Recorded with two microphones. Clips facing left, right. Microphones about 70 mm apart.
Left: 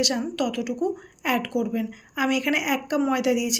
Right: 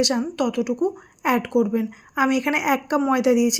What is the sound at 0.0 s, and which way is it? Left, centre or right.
Speech, right.